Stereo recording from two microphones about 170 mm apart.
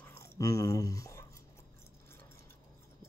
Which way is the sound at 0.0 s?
15° left (ahead or behind).